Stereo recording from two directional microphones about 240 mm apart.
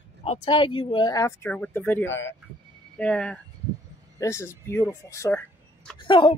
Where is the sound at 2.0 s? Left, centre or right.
Left.